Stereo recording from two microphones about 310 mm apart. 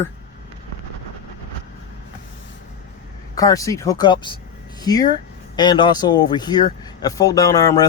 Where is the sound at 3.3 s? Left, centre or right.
Centre.